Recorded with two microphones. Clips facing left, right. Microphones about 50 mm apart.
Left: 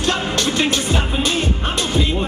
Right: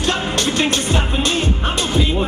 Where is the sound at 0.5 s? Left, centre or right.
Centre.